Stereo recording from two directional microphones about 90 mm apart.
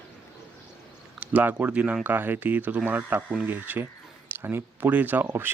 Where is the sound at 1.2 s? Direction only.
20° right (ahead or behind).